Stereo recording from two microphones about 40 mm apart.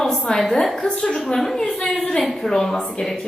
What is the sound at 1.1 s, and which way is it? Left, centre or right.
A woman's voice, centre.